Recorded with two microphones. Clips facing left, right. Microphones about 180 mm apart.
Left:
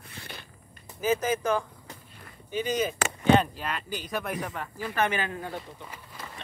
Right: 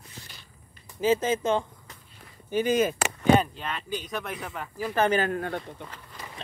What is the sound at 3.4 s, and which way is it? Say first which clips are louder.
Speech: even; centre (ahead or behind).